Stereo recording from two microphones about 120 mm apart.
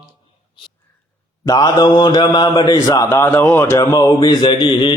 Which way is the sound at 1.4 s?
35° left (ahead or behind).